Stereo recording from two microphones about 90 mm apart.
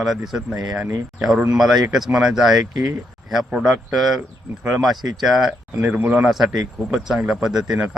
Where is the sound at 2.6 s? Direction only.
45° right (ahead or behind).